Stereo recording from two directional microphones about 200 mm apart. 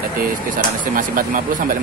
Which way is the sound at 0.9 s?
45° right (ahead or behind).